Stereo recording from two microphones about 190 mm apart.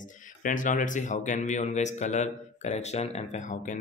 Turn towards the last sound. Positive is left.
turn(degrees=40)  # may be behind; listen again after turning